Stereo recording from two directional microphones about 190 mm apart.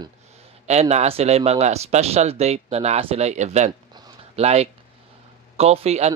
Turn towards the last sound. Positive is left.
turn(degrees=-35)  # may be behind; listen again after turning